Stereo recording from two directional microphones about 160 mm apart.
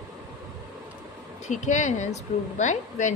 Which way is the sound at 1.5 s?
50° left (ahead or behind).